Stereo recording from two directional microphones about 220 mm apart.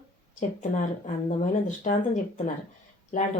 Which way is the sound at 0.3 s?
35° left (ahead or behind).